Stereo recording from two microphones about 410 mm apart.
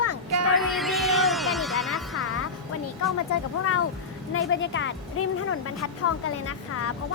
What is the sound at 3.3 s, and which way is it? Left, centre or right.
Speech, left.